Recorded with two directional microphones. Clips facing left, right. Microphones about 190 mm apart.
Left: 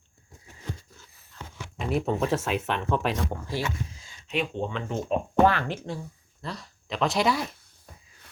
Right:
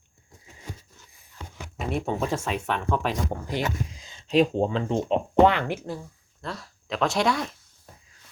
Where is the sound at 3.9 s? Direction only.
15° right (ahead or behind).